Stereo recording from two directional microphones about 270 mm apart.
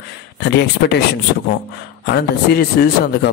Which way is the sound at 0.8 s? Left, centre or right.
Left.